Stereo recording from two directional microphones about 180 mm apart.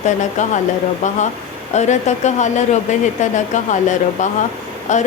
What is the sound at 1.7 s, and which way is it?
Speech, 40° left (ahead or behind).